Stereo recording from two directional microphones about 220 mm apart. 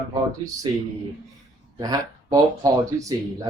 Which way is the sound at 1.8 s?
15° right (ahead or behind).